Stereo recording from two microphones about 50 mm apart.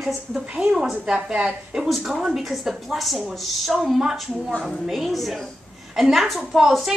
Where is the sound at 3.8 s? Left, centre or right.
Centre.